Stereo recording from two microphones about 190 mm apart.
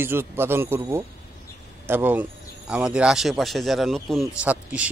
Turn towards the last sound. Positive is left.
turn(degrees=-5)  # may be behind; listen again after turning